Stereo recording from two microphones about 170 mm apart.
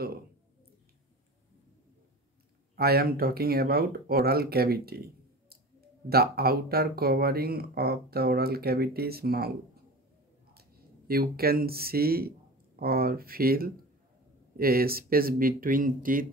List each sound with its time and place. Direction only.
2.7 s speech: 65° right (ahead or behind)
10.5 s speech: 65° right (ahead or behind)